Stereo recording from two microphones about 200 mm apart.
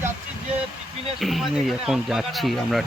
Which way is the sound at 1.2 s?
Centre (ahead or behind).